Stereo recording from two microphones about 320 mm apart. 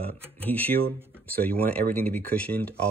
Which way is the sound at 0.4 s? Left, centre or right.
Centre.